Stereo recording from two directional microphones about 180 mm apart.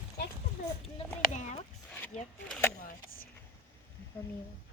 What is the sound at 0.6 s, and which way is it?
Speech, 45° left (ahead or behind).